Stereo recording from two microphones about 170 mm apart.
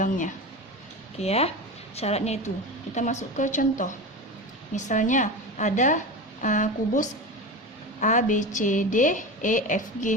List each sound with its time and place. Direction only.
1.2 s a woman's voice: 35° left (ahead or behind)